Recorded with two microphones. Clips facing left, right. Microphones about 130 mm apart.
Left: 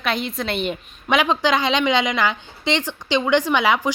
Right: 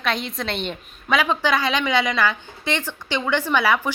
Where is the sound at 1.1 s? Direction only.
20° left (ahead or behind).